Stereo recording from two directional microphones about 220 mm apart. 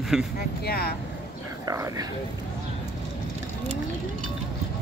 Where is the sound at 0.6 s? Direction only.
45° left (ahead or behind).